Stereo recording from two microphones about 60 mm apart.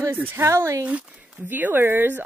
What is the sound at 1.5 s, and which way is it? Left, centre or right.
Speech, right.